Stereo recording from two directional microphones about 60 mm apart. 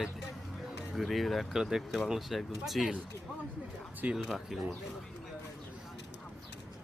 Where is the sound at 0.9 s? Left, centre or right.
Centre.